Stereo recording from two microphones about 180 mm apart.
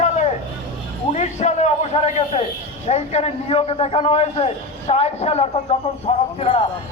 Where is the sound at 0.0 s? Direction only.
40° left (ahead or behind).